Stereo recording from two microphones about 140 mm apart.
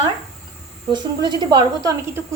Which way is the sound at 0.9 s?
30° right (ahead or behind).